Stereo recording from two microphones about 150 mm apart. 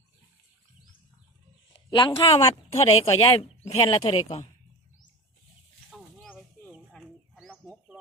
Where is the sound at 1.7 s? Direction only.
30° left (ahead or behind).